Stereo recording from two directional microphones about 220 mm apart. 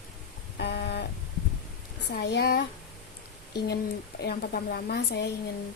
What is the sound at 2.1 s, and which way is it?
Speech, 50° left (ahead or behind).